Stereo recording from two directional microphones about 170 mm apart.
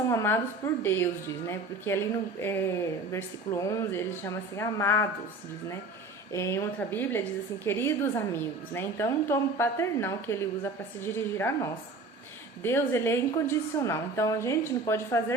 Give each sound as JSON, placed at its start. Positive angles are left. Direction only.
{"t": 0.1, "sound": "a woman's voice", "side_deg": 15}
{"t": 6.3, "sound": "a woman's voice", "side_deg": 15}